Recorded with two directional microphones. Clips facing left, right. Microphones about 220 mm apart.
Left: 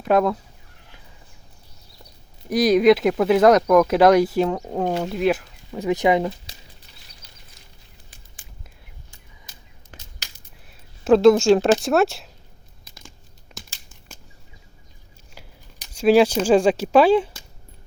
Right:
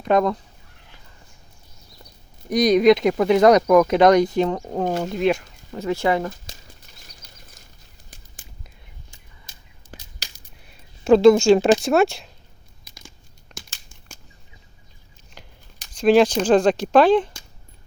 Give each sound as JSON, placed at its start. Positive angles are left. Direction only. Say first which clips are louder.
{"t": 0.0, "sound": "speech", "louder": "even", "side_deg": 5}
{"t": 2.5, "sound": "speech", "louder": "even", "side_deg": 5}
{"t": 5.8, "sound": "speech", "louder": "left 2 dB", "side_deg": 15}
{"t": 6.3, "sound": "speech", "louder": "right 3 dB", "side_deg": -45}
{"t": 7.0, "sound": "a sound", "louder": "right 3 dB", "side_deg": -45}
{"t": 9.5, "sound": "a sound", "louder": "right 5 dB", "side_deg": -35}
{"t": 10.7, "sound": "a sound", "louder": "right 1 dB", "side_deg": 0}
{"t": 11.8, "sound": "speech", "louder": "right 1 dB", "side_deg": 0}
{"t": 13.5, "sound": "crumpling", "louder": "even", "side_deg": 5}
{"t": 15.4, "sound": "speech", "louder": "even", "side_deg": 10}